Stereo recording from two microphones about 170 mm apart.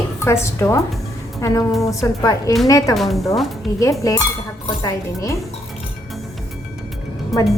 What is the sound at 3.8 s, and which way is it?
A woman's voice, 20° left (ahead or behind).